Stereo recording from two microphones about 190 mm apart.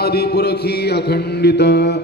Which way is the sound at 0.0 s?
55° left (ahead or behind).